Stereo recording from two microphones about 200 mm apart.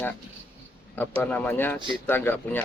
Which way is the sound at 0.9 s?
10° left (ahead or behind).